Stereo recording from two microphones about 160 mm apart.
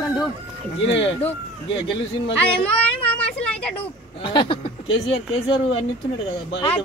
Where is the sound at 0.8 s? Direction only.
35° left (ahead or behind).